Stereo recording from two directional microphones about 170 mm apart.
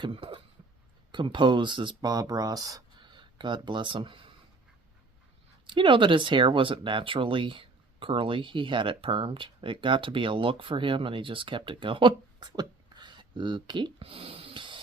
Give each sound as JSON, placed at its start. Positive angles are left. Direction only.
{"t": 0.0, "sound": "a sound", "side_deg": -30}
{"t": 1.1, "sound": "speech", "side_deg": -30}
{"t": 5.6, "sound": "speech", "side_deg": -30}